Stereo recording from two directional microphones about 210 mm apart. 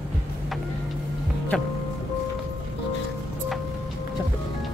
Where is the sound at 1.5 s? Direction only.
5° left (ahead or behind).